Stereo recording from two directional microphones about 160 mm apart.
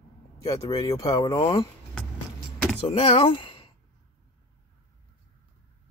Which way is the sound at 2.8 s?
35° left (ahead or behind).